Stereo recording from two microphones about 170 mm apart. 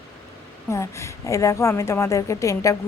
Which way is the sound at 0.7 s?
15° left (ahead or behind).